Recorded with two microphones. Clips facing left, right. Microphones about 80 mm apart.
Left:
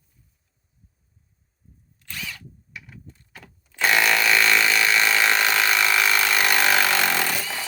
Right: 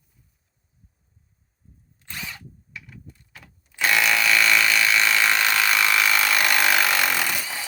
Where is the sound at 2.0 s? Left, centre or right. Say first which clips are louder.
Even; right.